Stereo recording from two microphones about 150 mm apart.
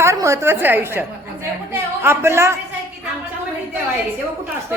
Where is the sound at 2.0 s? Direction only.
20° right (ahead or behind).